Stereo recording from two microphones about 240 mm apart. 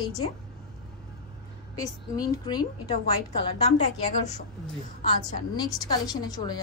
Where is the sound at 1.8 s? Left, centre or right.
Centre.